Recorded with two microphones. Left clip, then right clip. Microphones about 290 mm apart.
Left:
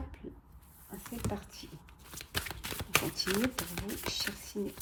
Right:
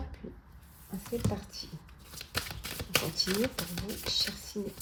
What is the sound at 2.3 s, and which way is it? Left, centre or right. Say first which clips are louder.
Shuffling cards: right 1 dB; centre.